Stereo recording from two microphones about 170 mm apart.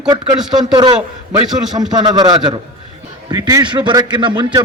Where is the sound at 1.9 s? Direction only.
25° right (ahead or behind).